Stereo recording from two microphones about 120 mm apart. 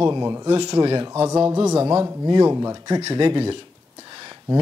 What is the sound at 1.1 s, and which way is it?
A man's voice, 20° right (ahead or behind).